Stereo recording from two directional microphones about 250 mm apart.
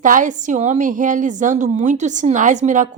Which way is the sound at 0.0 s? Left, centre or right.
Right.